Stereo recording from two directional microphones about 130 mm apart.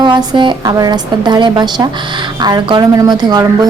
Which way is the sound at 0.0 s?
35° right (ahead or behind).